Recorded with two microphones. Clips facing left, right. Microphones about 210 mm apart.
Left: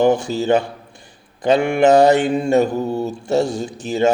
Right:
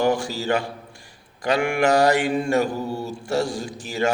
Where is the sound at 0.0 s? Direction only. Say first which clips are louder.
Left 6 dB; 20° left (ahead or behind).